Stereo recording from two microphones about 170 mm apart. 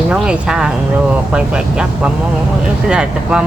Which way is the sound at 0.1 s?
5° right (ahead or behind).